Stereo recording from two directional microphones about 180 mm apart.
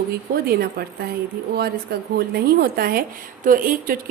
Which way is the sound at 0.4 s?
55° right (ahead or behind).